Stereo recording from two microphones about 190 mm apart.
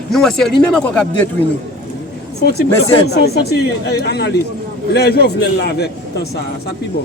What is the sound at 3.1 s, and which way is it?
A woman's voice, 60° left (ahead or behind).